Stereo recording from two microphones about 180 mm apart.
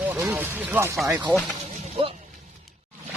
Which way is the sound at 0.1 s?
15° right (ahead or behind).